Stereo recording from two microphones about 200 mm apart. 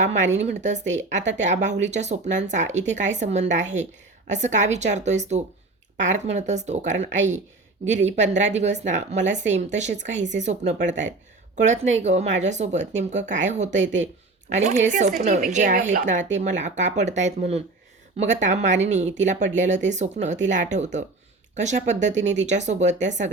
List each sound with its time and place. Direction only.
0.0 s speech: 35° right (ahead or behind)